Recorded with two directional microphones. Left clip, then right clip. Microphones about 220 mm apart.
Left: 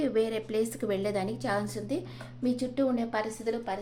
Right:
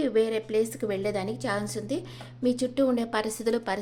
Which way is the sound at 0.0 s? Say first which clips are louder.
Right 3 dB; 15° right (ahead or behind).